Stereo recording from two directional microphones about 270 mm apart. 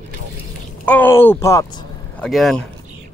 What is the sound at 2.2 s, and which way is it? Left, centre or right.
Speech, centre.